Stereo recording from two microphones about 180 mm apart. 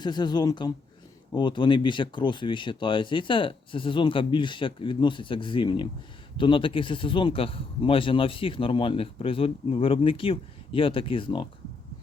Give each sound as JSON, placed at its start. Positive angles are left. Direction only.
{"t": 0.0, "sound": "speech", "side_deg": 25}